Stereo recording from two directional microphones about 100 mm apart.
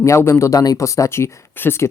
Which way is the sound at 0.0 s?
30° left (ahead or behind).